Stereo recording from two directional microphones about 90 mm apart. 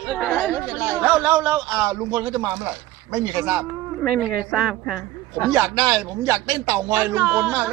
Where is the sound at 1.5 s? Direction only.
30° right (ahead or behind); by 3.5 s 45° right (ahead or behind).